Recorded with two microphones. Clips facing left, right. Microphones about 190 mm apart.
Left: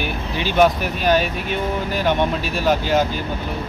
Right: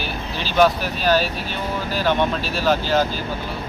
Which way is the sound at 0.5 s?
20° left (ahead or behind).